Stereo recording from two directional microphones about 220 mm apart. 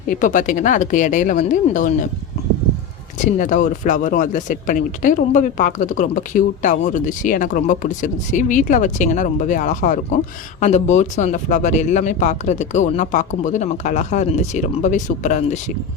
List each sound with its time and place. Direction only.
0.1 s speech: 35° left (ahead or behind)
3.3 s speech: 35° left (ahead or behind)